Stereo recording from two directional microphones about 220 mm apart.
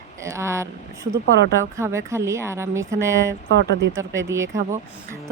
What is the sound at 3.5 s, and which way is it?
Speech, 55° right (ahead or behind).